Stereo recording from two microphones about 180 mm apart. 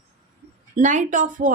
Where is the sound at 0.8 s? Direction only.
45° right (ahead or behind).